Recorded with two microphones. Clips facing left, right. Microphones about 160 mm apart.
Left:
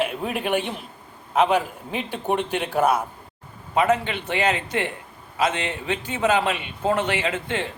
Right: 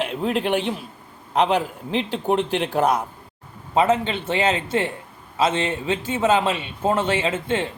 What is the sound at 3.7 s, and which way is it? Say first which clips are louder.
A man's voice: right 2 dB; 25° right (ahead or behind).